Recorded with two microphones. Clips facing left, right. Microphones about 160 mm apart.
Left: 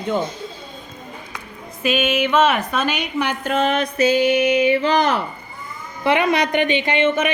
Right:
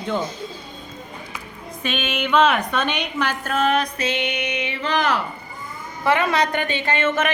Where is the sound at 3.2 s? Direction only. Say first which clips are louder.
Left 2 dB; 25° left (ahead or behind).